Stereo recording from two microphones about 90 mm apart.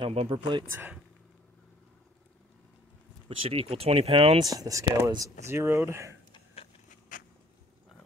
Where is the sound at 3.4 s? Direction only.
90° right.